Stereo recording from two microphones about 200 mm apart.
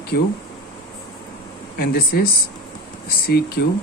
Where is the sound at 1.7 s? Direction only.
50° left (ahead or behind).